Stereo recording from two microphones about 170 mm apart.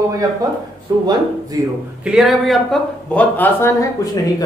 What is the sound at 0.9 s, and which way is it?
Speech, 20° right (ahead or behind).